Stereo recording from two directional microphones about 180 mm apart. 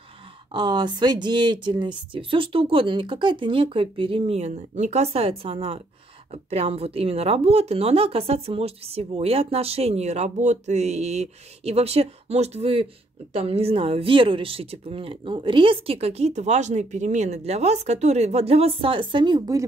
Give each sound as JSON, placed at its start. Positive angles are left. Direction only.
{"t": 0.5, "sound": "speech", "side_deg": -25}